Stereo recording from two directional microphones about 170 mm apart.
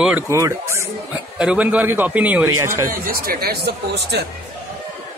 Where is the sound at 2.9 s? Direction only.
60° right (ahead or behind); by 4.2 s 80° right.